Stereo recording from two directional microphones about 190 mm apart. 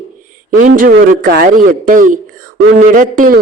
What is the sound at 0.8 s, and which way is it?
Speech, 50° right (ahead or behind).